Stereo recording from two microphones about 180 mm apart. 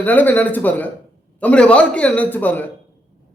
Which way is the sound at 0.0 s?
10° left (ahead or behind).